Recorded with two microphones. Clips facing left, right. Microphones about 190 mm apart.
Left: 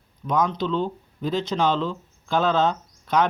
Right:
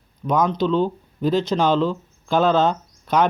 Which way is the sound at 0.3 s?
50° right (ahead or behind).